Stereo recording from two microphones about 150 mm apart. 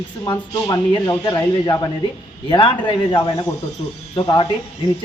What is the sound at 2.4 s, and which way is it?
Speech, 35° left (ahead or behind).